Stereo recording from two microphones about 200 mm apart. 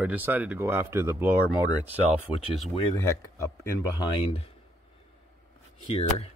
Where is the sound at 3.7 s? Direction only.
20° left (ahead or behind).